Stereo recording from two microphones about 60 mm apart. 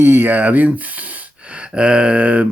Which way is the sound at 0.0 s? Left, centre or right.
Right.